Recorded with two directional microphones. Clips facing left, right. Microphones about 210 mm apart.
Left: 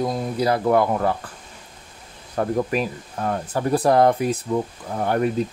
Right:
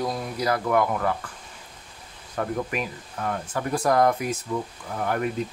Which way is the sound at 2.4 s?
35° left (ahead or behind).